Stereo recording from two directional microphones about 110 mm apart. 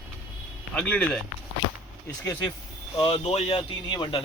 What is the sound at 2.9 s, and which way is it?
Speech, 55° left (ahead or behind).